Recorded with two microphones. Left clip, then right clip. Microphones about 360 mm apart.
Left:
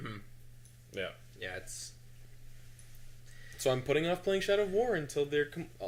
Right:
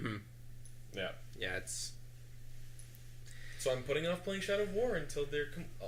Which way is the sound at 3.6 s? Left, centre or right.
Left.